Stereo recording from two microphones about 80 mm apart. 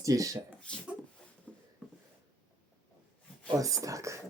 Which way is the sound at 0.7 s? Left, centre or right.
Centre.